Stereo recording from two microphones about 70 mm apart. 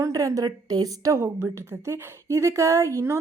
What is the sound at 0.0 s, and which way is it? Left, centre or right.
A woman's voice, right.